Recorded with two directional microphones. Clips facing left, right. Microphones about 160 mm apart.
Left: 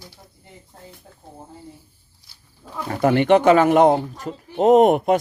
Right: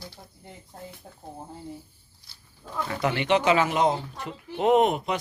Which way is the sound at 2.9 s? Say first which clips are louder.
Left 9 dB; 45° left (ahead or behind).